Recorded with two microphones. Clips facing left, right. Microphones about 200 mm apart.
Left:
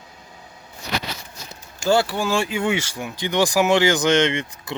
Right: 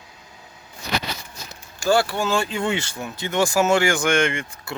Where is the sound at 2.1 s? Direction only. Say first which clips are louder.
Left 1 dB; 15° left (ahead or behind).